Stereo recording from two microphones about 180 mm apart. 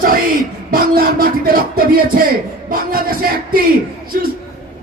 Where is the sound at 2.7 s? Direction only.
55° right (ahead or behind).